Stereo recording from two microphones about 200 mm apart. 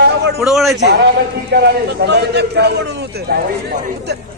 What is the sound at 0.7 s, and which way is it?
A man's voice, 55° right (ahead or behind).